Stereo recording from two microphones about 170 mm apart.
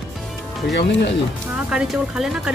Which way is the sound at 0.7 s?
80° left.